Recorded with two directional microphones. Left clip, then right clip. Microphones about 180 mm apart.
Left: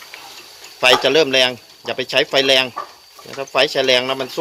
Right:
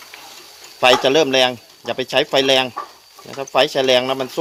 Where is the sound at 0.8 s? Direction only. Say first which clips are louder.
Even; 55° right (ahead or behind).